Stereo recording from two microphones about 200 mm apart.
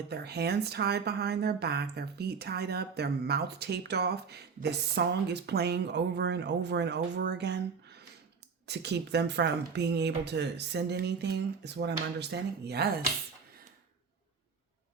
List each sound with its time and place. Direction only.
0.1 s speech: 55° right (ahead or behind)